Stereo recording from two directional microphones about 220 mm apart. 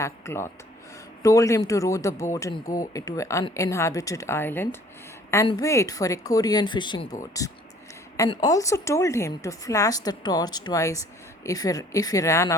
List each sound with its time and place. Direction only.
0.0 s speech: 10° left (ahead or behind)